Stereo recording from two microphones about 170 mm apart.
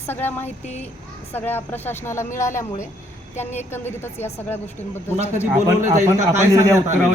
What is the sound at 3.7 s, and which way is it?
Speech, 15° left (ahead or behind).